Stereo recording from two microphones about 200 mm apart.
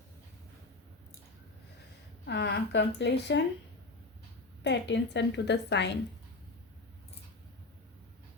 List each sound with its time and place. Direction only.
2.2 s a woman's voice: 55° left (ahead or behind)
4.6 s a woman's voice: 60° left (ahead or behind)